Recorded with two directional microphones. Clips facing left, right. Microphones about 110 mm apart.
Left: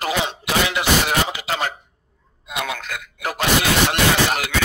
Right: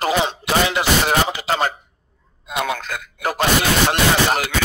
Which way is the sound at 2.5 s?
35° right (ahead or behind).